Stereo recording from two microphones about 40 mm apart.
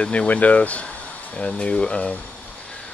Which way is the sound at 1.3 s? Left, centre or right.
Centre.